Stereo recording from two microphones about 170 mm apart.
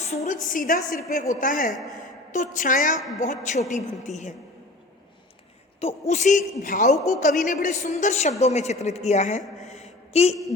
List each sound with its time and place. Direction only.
0.1 s a woman's voice: 40° left (ahead or behind)
0.4 s a woman's voice: 50° left (ahead or behind)
5.8 s a woman's voice: 45° left (ahead or behind)